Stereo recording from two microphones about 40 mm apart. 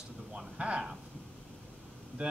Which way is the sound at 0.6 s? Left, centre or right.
Right.